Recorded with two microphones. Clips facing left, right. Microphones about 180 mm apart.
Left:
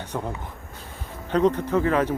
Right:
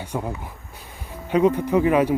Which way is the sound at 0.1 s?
10° right (ahead or behind).